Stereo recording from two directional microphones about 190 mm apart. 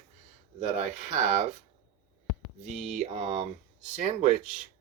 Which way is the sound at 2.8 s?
35° right (ahead or behind).